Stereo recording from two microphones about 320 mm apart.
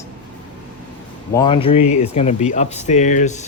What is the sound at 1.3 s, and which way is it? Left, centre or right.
Speech, centre.